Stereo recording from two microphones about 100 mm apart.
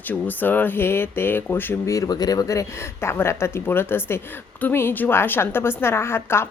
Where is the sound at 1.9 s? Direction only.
40° left (ahead or behind).